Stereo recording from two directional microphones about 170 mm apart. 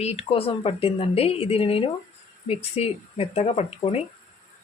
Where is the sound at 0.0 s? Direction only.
40° left (ahead or behind).